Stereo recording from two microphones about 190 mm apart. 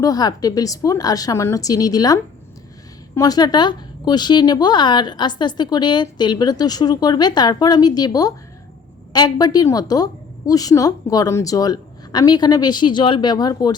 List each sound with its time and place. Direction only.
0.0 s a woman's voice: 20° left (ahead or behind)